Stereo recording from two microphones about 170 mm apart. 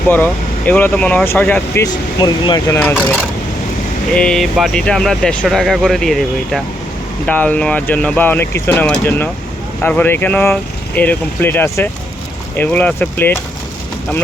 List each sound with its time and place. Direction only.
0.1 s speech: 10° left (ahead or behind)
1.9 s speech: 25° left (ahead or behind)
4.1 s speech: 5° left (ahead or behind)